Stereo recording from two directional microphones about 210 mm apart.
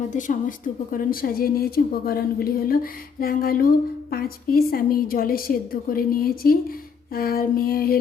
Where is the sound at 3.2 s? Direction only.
45° left (ahead or behind).